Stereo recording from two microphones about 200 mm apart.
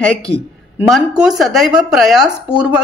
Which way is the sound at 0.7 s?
Centre (ahead or behind).